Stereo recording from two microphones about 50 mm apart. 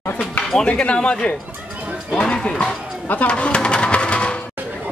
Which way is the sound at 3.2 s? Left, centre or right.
Left.